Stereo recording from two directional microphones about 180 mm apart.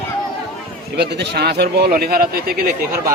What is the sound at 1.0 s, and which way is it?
Speech, 70° right (ahead or behind).